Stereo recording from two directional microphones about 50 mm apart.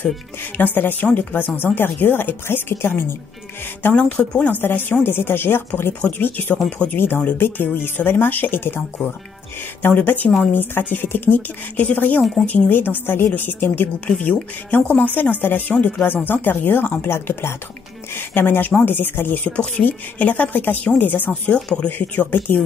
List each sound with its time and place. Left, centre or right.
0.6 s speech: left
2.4 s speech: left
3.9 s speech: left
4.5 s speech: left
5.9 s speech: left
7.0 s speech: left
12.4 s speech: left
18.1 s speech: left